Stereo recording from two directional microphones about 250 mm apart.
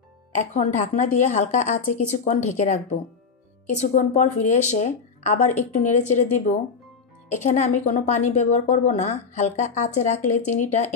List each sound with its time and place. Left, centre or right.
0.3 s a woman's voice: left
7.2 s a woman's voice: left